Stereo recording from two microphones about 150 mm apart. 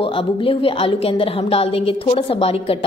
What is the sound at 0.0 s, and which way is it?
A woman's voice, 35° left (ahead or behind).